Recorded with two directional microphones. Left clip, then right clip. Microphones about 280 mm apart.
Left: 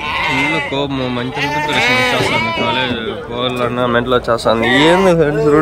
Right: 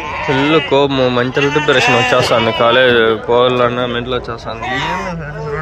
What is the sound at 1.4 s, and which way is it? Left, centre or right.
Speech, left.